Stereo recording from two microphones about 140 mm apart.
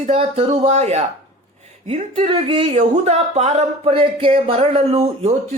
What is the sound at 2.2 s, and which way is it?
A man's voice, 35° right (ahead or behind).